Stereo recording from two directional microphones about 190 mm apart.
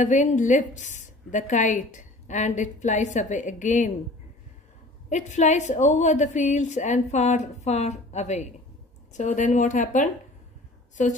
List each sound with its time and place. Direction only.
0.0 s a woman's voice: 40° left (ahead or behind)
5.1 s a woman's voice: 40° left (ahead or behind)